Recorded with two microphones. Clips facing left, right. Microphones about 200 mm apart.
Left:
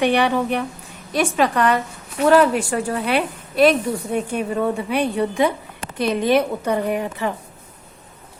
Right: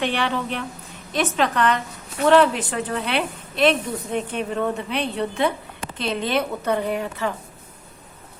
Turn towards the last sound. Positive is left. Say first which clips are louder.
# left 2 dB
turn(degrees=15)  # may be behind; listen again after turning